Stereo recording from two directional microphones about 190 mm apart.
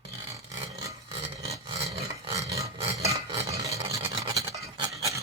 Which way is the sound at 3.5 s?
15° right (ahead or behind).